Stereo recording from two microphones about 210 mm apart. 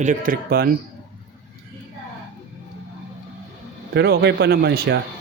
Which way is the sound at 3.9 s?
55° right (ahead or behind).